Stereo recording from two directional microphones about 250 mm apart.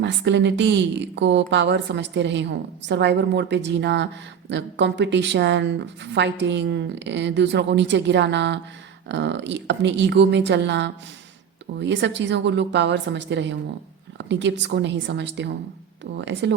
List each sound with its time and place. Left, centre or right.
0.0 s a woman's voice: right